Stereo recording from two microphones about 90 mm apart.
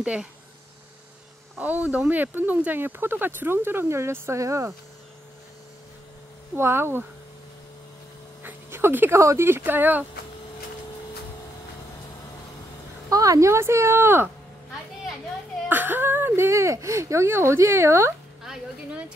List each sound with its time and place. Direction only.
0.0 s speech: 10° right (ahead or behind)
1.6 s speech: 15° right (ahead or behind); by 4.7 s 35° right (ahead or behind)
6.5 s speech: 25° right (ahead or behind)
8.4 s a sound: 25° right (ahead or behind)
9.2 s speech: 30° right (ahead or behind)
13.1 s speech: 40° right (ahead or behind)
15.7 s speech: 20° right (ahead or behind)
18.4 s a sound: 5° right (ahead or behind)